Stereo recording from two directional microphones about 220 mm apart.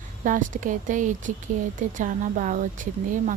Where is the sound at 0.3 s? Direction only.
35° right (ahead or behind).